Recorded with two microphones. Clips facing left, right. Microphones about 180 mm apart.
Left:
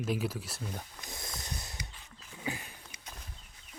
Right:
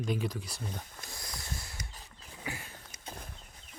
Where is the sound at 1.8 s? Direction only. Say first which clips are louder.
Even; 40° right (ahead or behind).